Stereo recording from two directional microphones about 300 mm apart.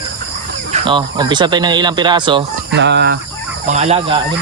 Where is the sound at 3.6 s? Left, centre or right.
Right.